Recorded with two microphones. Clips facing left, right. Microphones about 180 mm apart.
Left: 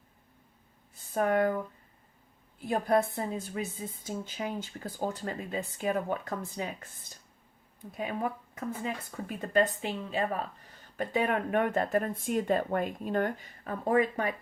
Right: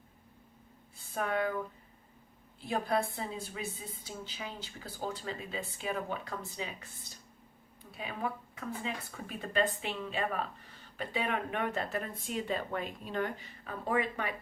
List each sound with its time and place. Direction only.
1.1 s speech: 45° left (ahead or behind)
2.6 s speech: 45° left (ahead or behind)